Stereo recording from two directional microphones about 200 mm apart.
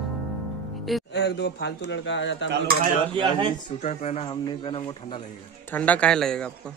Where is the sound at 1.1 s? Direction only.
60° left (ahead or behind).